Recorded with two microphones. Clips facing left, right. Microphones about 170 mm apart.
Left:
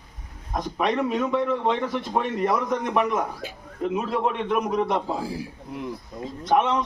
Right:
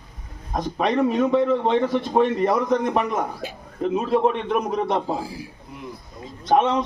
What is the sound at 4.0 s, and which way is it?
Speech, 30° right (ahead or behind).